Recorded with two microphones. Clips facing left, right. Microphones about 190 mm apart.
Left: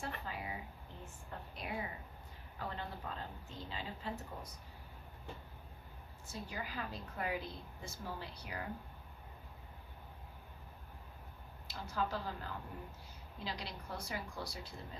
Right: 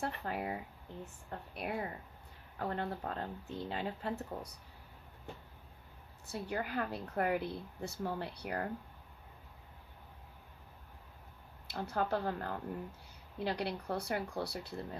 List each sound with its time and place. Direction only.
0.0 s a woman's voice: 60° right (ahead or behind)
6.2 s a woman's voice: 65° right (ahead or behind)
11.7 s a woman's voice: 60° right (ahead or behind)